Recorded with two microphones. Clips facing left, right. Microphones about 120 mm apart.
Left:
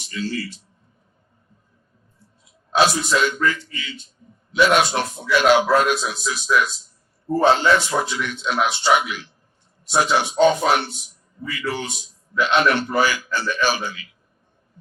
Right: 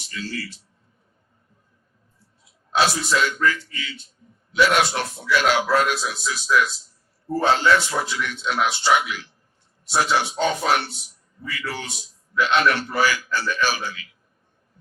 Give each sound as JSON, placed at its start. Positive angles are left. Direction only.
{"t": 0.1, "sound": "a man's voice", "side_deg": 20}
{"t": 2.7, "sound": "a man's voice", "side_deg": 20}